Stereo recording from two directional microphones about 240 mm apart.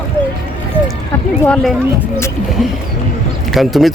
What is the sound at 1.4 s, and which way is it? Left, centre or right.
Speech, centre.